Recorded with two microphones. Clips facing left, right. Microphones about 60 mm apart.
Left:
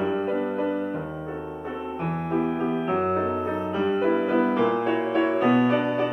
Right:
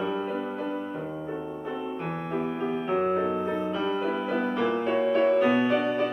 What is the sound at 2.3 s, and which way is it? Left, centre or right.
Music, centre.